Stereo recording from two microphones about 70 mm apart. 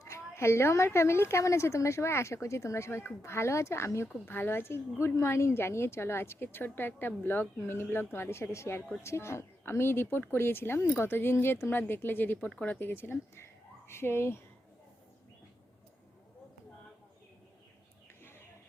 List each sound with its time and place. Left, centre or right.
0.0 s a woman's voice: left
12.5 s speech: centre
12.8 s speech: left